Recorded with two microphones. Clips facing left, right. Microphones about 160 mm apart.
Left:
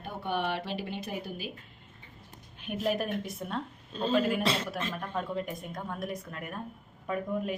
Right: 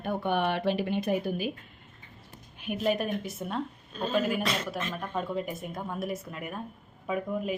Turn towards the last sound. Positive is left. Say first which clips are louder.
# right 1 dB
turn(degrees=-5)  # may be behind; listen again after turning